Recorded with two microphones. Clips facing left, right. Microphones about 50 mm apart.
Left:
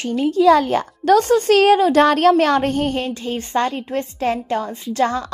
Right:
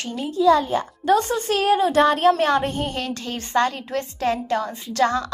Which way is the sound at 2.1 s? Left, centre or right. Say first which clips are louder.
Left 3 dB; left.